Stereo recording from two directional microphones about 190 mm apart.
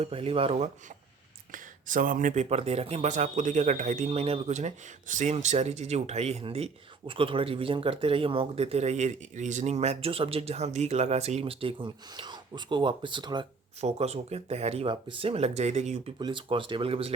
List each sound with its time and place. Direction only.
0.0 s speech: 30° right (ahead or behind)
1.9 s speech: 45° right (ahead or behind); by 13.5 s 25° right (ahead or behind)
13.8 s speech: 35° right (ahead or behind)
16.1 s speech: 25° right (ahead or behind)